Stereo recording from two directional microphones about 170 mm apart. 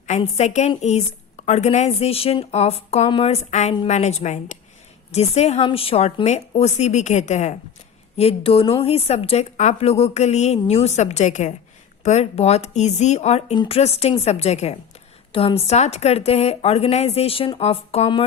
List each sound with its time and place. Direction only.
0.1 s a woman's voice: 40° left (ahead or behind)